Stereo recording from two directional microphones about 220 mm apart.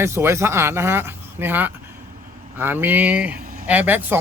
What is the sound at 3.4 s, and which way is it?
Vehicle, 40° right (ahead or behind).